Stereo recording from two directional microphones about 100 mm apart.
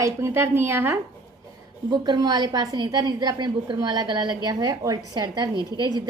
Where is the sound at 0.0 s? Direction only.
30° right (ahead or behind).